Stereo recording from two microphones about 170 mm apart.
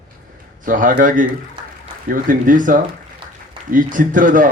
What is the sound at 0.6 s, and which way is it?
Speech, 50° right (ahead or behind).